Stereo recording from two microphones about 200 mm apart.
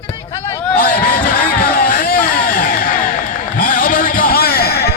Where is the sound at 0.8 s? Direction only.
45° left (ahead or behind).